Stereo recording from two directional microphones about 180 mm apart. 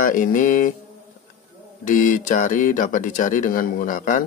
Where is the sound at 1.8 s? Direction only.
45° left (ahead or behind).